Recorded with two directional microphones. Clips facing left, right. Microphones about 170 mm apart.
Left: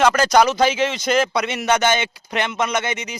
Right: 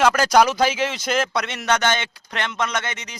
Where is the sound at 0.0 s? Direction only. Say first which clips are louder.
Left 1 dB; 5° right (ahead or behind).